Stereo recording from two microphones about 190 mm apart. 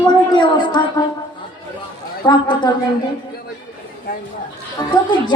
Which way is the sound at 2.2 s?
25° left (ahead or behind).